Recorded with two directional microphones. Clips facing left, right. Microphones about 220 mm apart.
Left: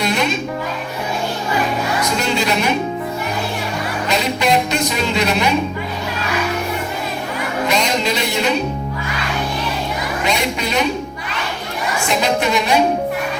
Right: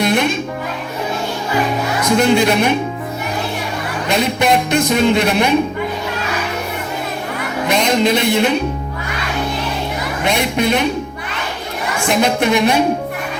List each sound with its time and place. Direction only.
0.0 s music: 55° right (ahead or behind)
2.1 s speech: 55° right (ahead or behind)
4.1 s speech: 50° right (ahead or behind)
7.7 s a man's voice: 55° right (ahead or behind)
10.2 s speech: 55° right (ahead or behind)
12.0 s speech: 55° right (ahead or behind)